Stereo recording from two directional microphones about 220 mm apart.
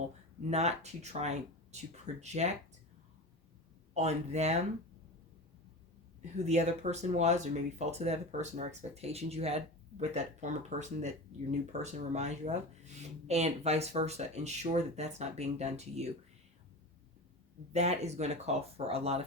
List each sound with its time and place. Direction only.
0.4 s speech: 30° right (ahead or behind)
3.9 s speech: 30° right (ahead or behind)
6.3 s speech: 30° right (ahead or behind)
17.7 s speech: 30° right (ahead or behind)